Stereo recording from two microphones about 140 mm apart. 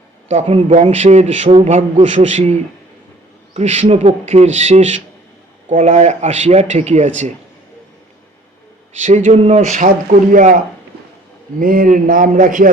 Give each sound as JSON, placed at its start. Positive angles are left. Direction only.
{"t": 0.3, "sound": "speech", "side_deg": -45}
{"t": 2.0, "sound": "a man's voice", "side_deg": -40}
{"t": 9.0, "sound": "a man's voice", "side_deg": -60}
{"t": 11.6, "sound": "a man's voice", "side_deg": -80}